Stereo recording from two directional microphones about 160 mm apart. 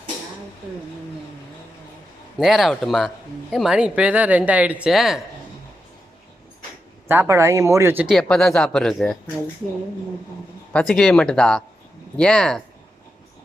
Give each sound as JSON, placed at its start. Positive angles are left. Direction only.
{"t": 2.4, "sound": "speech", "side_deg": 0}
{"t": 7.1, "sound": "speech", "side_deg": -15}
{"t": 8.0, "sound": "speech", "side_deg": 0}
{"t": 10.7, "sound": "speech", "side_deg": 5}